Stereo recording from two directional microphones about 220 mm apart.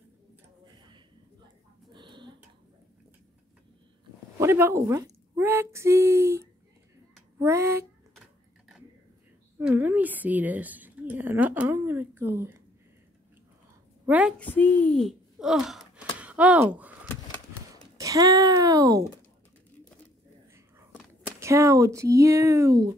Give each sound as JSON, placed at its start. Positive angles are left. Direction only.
{"t": 1.9, "sound": "a sound", "side_deg": -20}
{"t": 4.4, "sound": "speech", "side_deg": -10}
{"t": 9.6, "sound": "speech", "side_deg": -10}
{"t": 14.0, "sound": "a woman's voice", "side_deg": -5}
{"t": 14.4, "sound": "speech", "side_deg": 10}
{"t": 16.2, "sound": "a sound", "side_deg": -5}
{"t": 17.9, "sound": "speech", "side_deg": -15}
{"t": 21.4, "sound": "speech", "side_deg": -15}